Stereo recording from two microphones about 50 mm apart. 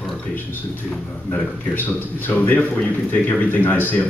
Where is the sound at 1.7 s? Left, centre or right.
Left.